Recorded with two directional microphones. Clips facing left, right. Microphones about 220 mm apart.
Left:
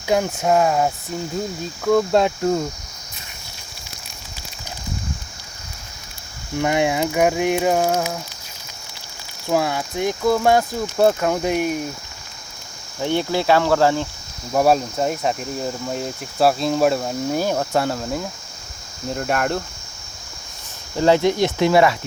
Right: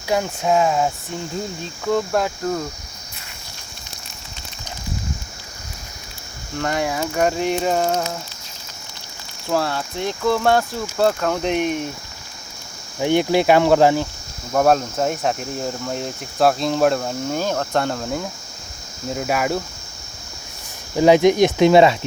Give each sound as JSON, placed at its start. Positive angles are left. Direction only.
{"t": 0.1, "sound": "cricket", "side_deg": 5}
{"t": 2.1, "sound": "speech", "side_deg": 20}
{"t": 6.6, "sound": "speech", "side_deg": 15}
{"t": 9.5, "sound": "speech", "side_deg": 10}
{"t": 13.0, "sound": "cricket", "side_deg": -15}
{"t": 14.5, "sound": "cricket", "side_deg": 5}
{"t": 20.9, "sound": "cricket", "side_deg": -15}